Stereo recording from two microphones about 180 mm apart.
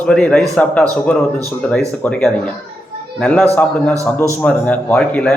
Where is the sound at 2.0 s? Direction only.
5° left (ahead or behind).